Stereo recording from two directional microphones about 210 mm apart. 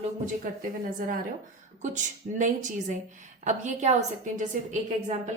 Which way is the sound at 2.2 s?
35° right (ahead or behind).